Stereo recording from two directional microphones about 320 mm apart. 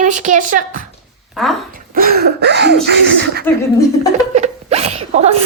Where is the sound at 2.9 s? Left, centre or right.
Right.